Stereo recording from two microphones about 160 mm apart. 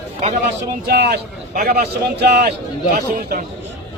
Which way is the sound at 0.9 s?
90° right.